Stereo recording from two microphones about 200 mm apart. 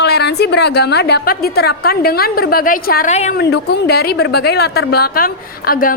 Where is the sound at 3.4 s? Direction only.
55° left (ahead or behind).